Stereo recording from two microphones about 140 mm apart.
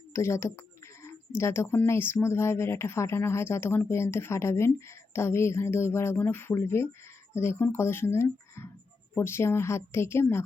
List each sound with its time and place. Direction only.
0.1 s speech: 20° left (ahead or behind)